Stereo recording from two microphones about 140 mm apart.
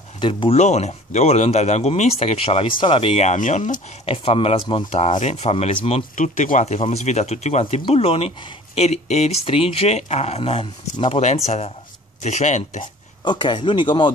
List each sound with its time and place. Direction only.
0.2 s speech: 40° left (ahead or behind); by 3.8 s 65° left (ahead or behind)
4.0 s speech: 45° left (ahead or behind)
4.9 s speech: 55° left (ahead or behind)
11.1 s speech: 55° left (ahead or behind)
13.2 s speech: 35° left (ahead or behind)